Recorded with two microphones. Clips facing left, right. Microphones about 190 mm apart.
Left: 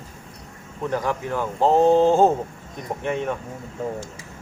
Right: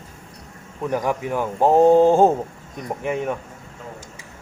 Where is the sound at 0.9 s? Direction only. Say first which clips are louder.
Right 2 dB; 15° right (ahead or behind).